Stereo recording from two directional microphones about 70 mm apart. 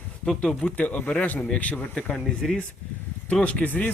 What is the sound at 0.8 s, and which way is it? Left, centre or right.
Speech, left.